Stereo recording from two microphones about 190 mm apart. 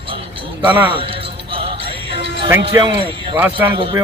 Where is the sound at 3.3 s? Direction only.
10° right (ahead or behind).